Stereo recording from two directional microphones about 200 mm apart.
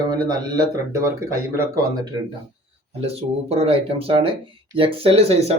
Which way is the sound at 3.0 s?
30° right (ahead or behind).